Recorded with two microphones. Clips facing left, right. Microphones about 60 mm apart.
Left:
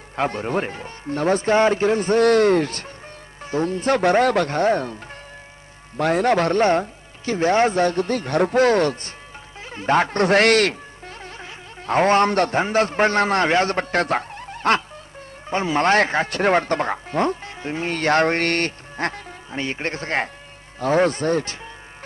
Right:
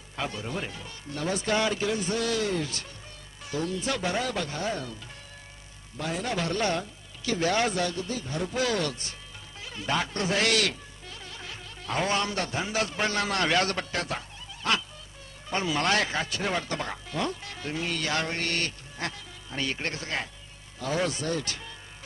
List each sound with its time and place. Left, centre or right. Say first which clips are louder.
0.2 s speech: left 10 dB; left
6.0 s speech: left 12 dB; left
9.6 s music: left 10 dB; left
11.9 s speech: left 11 dB; left
13.9 s speech: left 11 dB; left
15.4 s speech: left 8 dB; left
19.5 s speech: left 5 dB; left